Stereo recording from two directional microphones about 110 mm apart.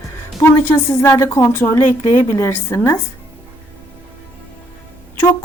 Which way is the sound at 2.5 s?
25° left (ahead or behind).